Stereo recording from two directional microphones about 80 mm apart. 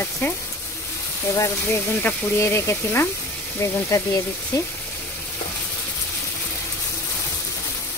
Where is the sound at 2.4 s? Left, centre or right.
Left.